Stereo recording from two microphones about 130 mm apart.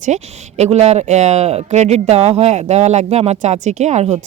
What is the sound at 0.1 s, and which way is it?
Speech, 60° right (ahead or behind).